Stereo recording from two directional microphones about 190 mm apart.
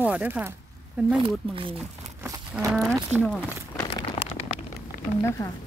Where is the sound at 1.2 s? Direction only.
25° right (ahead or behind).